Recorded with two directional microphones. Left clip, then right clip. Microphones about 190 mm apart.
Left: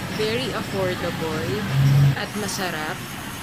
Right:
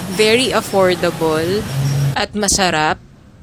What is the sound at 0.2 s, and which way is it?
Speech, 60° right (ahead or behind).